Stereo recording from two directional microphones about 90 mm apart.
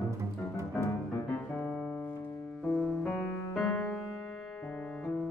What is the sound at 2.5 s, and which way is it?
Music, 10° left (ahead or behind).